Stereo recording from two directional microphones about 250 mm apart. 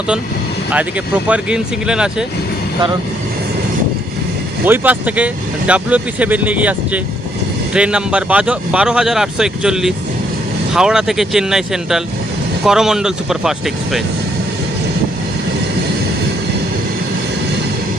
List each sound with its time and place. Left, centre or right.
1.3 s speech: centre
4.6 s speech: centre